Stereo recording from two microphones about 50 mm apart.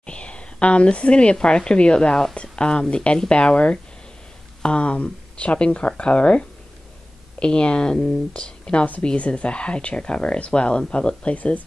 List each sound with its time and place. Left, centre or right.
0.0 s speech: left